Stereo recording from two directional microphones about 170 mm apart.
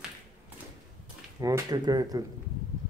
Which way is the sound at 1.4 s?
20° right (ahead or behind).